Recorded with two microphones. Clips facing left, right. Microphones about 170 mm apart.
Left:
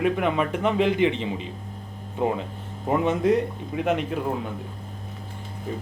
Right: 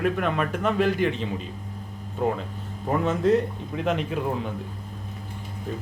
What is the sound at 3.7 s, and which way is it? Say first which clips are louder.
Speech: left 2 dB; 5° left (ahead or behind).